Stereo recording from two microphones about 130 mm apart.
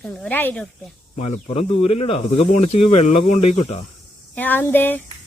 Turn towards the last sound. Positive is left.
turn(degrees=15)  # may be behind; listen again after turning